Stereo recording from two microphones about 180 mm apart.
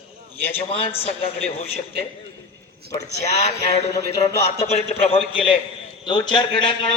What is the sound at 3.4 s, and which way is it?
A man's voice, 35° left (ahead or behind).